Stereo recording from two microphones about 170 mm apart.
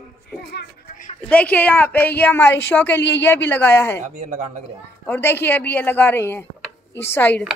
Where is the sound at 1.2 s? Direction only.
10° left (ahead or behind).